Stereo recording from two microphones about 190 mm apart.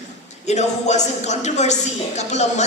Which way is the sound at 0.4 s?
35° left (ahead or behind).